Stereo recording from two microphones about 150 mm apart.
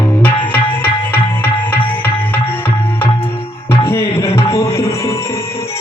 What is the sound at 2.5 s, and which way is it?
Tabla, 15° left (ahead or behind).